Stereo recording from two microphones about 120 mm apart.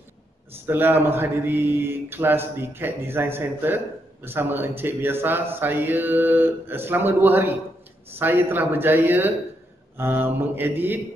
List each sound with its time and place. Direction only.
0.7 s speech: 15° right (ahead or behind)
9.9 s mantra: 20° right (ahead or behind)